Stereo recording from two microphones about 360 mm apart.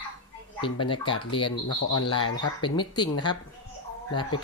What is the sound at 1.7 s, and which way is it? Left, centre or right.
Speech, left.